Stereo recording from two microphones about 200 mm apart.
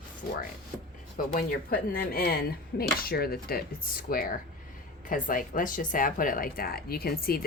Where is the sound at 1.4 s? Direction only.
45° left (ahead or behind).